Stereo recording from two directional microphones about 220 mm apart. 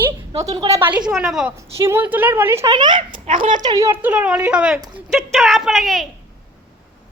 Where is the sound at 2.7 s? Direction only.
20° right (ahead or behind); by 6.1 s centre (ahead or behind).